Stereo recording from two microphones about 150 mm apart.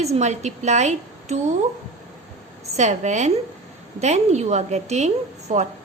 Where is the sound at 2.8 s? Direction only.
50° right (ahead or behind).